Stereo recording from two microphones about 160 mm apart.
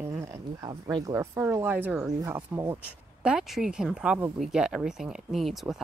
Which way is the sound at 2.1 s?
25° right (ahead or behind).